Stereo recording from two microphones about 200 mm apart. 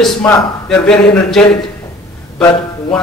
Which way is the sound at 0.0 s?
10° left (ahead or behind).